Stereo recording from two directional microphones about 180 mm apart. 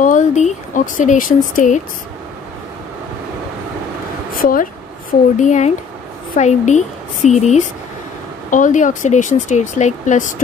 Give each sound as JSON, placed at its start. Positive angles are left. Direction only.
{"t": 0.0, "sound": "speech", "side_deg": 45}
{"t": 4.3, "sound": "a woman's voice", "side_deg": 50}